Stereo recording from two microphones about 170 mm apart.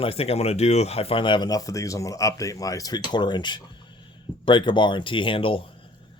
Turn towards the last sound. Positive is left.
turn(degrees=30)  # may be behind; listen again after turning